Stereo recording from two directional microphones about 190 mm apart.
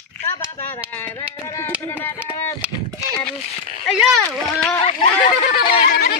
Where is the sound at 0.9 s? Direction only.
10° left (ahead or behind).